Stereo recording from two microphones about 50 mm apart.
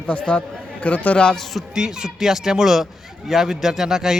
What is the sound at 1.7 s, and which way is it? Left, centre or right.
Speech, centre.